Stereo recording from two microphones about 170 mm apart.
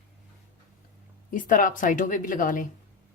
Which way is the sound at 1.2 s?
50° left (ahead or behind).